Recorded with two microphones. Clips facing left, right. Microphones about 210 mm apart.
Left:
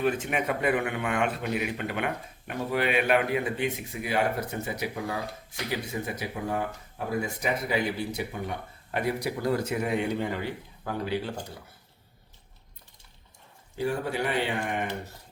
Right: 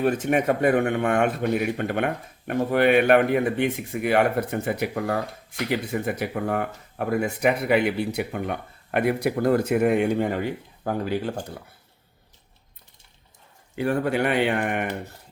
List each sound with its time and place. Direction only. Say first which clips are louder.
0.0 s speech: right 6 dB; 45° right (ahead or behind)
13.7 s speech: right 6 dB; 65° right (ahead or behind)